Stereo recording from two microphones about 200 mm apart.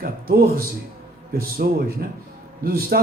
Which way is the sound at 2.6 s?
50° right (ahead or behind).